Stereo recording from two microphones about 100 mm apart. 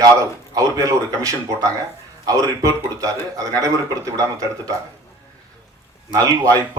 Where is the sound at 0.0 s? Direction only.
35° right (ahead or behind).